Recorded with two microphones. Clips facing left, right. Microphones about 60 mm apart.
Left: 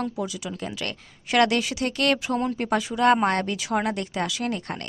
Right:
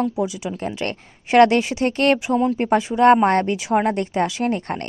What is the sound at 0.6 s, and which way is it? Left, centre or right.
A woman's voice, right.